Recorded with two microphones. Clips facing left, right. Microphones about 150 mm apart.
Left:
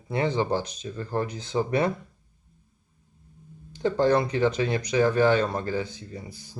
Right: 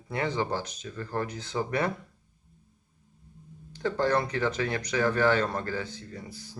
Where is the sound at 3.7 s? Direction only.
20° left (ahead or behind).